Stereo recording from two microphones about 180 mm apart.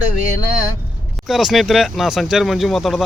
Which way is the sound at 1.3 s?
Centre (ahead or behind).